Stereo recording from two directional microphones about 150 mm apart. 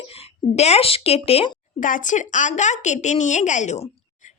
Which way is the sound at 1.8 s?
60° left (ahead or behind).